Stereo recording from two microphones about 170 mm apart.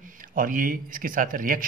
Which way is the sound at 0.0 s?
50° right (ahead or behind).